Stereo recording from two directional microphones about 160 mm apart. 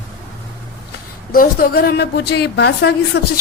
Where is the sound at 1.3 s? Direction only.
70° left (ahead or behind).